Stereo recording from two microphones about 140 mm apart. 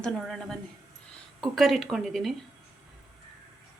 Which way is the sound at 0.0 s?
5° left (ahead or behind).